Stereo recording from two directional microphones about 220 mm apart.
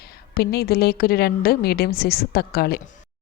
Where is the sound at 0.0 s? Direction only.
45° left (ahead or behind).